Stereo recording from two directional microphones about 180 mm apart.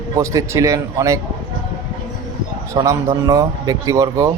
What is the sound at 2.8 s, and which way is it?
Speech, 15° right (ahead or behind).